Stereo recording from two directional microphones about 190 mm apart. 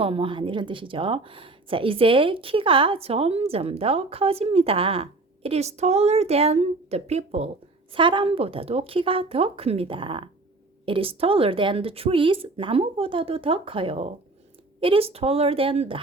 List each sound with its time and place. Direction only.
0.0 s speech: 30° right (ahead or behind)